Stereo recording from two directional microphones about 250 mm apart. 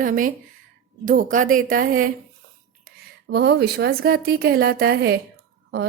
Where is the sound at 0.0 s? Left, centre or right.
Right.